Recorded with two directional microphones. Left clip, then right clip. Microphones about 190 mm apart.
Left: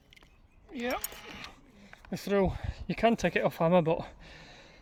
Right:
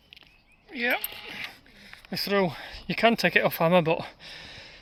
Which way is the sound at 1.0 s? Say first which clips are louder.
Right 6 dB; 15° left (ahead or behind).